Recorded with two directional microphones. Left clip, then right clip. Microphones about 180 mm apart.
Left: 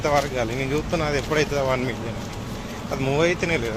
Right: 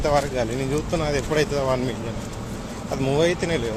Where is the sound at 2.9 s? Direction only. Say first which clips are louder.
Even; 15° right (ahead or behind).